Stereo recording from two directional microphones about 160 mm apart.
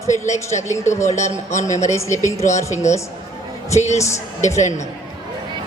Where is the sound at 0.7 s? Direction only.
15° left (ahead or behind).